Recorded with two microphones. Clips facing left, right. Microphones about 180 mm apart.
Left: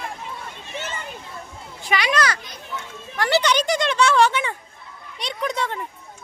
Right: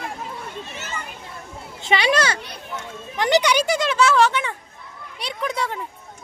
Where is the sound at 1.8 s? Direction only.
30° right (ahead or behind).